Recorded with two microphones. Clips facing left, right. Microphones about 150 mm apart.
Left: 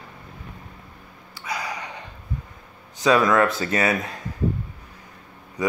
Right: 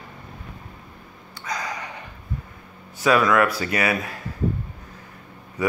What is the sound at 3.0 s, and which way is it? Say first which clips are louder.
Speech: even; 25° left (ahead or behind).